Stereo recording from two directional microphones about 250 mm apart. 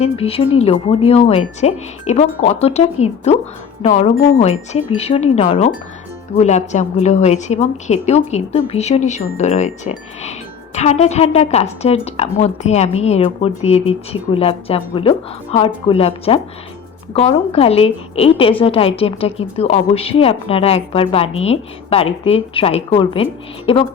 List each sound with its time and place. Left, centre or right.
0.0 s a woman's voice: left